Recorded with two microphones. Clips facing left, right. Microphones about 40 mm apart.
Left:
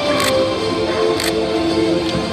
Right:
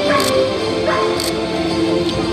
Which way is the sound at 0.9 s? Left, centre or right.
Centre.